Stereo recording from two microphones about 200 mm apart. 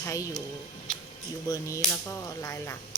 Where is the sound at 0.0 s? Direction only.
15° left (ahead or behind).